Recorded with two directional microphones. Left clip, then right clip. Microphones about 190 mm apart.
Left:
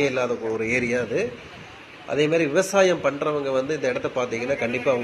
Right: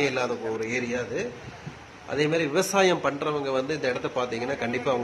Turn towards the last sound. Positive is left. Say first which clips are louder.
# left 4 dB
turn(degrees=0)  # may be behind; listen again after turning